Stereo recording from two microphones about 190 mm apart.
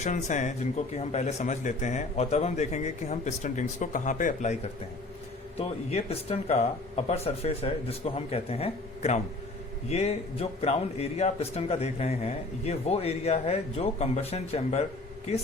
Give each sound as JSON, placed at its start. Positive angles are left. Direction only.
{"t": 0.0, "sound": "a man's voice", "side_deg": 40}